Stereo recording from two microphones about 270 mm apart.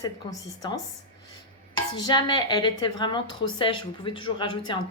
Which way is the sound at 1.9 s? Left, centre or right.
Centre.